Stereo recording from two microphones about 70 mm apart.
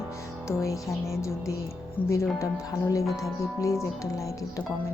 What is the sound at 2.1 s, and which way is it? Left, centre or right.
Speech, left.